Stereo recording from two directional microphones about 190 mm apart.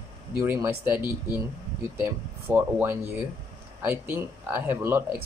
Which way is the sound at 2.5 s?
10° right (ahead or behind).